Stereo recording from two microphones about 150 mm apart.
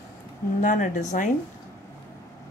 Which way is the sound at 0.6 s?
60° left (ahead or behind).